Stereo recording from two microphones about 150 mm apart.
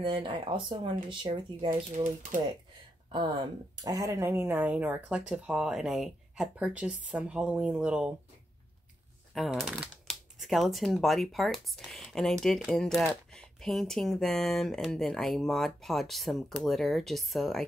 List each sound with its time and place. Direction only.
0.0 s speech: 35° right (ahead or behind)
3.1 s speech: 30° right (ahead or behind); by 8.1 s 5° right (ahead or behind)
9.3 s speech: centre (ahead or behind)